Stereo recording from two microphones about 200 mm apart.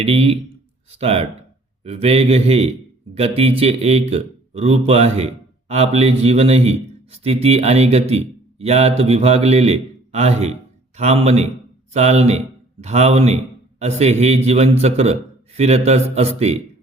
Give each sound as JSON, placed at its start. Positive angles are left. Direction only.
{"t": 0.0, "sound": "a man's voice", "side_deg": -30}